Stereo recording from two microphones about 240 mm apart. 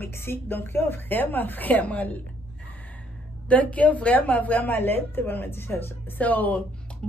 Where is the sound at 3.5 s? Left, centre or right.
Centre.